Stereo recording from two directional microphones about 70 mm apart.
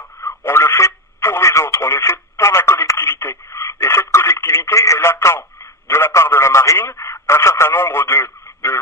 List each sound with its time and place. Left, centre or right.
0.2 s radio: left
5.9 s a sound: left
6.8 s radio: left